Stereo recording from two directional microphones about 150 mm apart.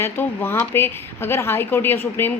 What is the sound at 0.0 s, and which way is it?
A woman's voice, 15° left (ahead or behind).